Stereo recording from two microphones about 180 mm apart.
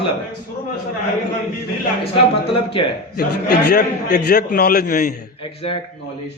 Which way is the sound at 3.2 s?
60° left (ahead or behind).